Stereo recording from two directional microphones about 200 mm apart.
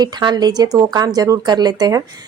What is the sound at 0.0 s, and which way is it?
A woman's voice, 20° right (ahead or behind).